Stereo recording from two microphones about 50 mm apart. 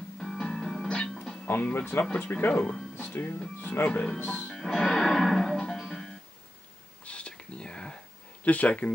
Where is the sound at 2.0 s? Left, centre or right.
Left.